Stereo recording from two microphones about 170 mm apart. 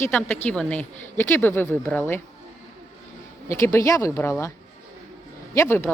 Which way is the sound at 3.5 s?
15° left (ahead or behind).